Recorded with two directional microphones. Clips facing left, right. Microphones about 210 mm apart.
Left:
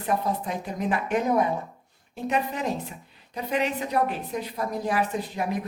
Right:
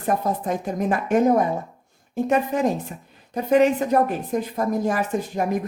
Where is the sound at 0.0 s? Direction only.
45° right (ahead or behind).